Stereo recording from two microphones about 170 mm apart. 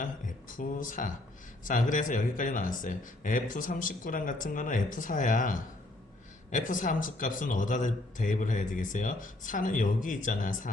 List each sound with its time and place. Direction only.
0.0 s a man's voice: 50° left (ahead or behind)